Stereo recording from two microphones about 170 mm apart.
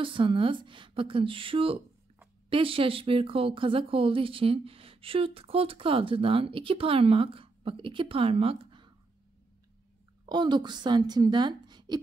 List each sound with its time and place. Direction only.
0.0 s speech: 30° right (ahead or behind)
10.2 s a woman's voice: 25° right (ahead or behind)